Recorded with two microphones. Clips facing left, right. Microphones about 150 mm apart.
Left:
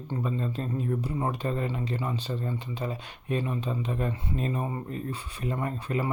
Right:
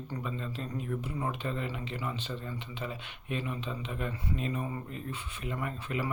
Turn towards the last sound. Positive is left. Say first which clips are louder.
# left 5 dB
turn(degrees=35)  # may be behind; listen again after turning